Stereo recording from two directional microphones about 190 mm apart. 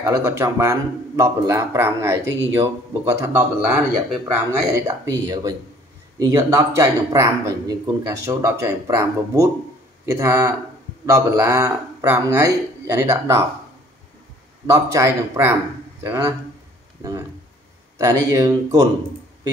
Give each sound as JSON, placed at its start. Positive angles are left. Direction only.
{"t": 0.0, "sound": "speech", "side_deg": -15}
{"t": 14.9, "sound": "speech", "side_deg": -15}
{"t": 17.9, "sound": "speech", "side_deg": -20}